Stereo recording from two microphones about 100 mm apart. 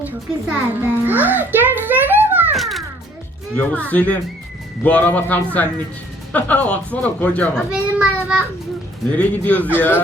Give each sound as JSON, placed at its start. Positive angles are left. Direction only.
{"t": 0.0, "sound": "music", "side_deg": -15}
{"t": 2.6, "sound": "music", "side_deg": 0}
{"t": 3.5, "sound": "speech", "side_deg": 15}
{"t": 7.7, "sound": "child singing", "side_deg": -10}
{"t": 9.1, "sound": "speech", "side_deg": 15}